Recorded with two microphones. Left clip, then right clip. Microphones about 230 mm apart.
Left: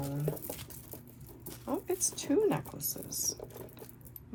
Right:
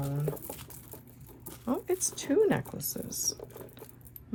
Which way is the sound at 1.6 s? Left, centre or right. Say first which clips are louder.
Right 3 dB; right.